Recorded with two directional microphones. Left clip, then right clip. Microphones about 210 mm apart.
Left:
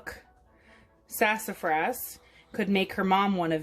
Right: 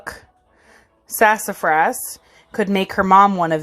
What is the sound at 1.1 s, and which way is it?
A woman's voice, 20° right (ahead or behind).